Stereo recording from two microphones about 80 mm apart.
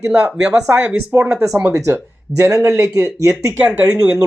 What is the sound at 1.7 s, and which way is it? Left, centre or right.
Speech, right.